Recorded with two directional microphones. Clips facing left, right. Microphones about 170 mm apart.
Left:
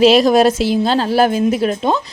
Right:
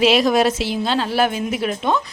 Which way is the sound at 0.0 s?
40° left (ahead or behind).